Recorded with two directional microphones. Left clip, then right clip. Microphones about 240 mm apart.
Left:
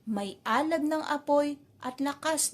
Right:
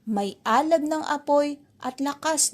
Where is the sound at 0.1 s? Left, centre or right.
Right.